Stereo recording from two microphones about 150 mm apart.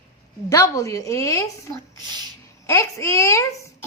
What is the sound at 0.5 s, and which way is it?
A woman's voice, 20° left (ahead or behind).